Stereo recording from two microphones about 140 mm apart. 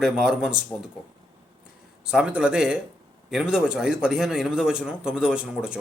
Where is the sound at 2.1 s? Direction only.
5° right (ahead or behind).